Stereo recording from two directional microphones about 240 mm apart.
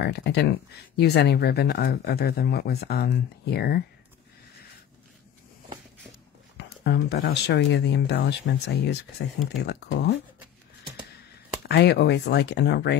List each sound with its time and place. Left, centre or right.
0.0 s speech: left
6.8 s speech: left
11.6 s speech: left